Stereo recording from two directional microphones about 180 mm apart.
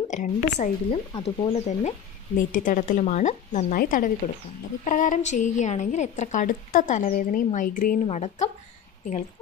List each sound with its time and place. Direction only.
0.1 s speech: 40° left (ahead or behind)
1.1 s a woman's voice: 30° left (ahead or behind)